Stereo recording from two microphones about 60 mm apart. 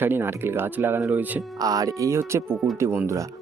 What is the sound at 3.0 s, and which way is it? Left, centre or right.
Speech, right.